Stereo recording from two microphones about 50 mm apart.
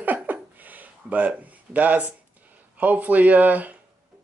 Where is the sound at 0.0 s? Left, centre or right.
Right.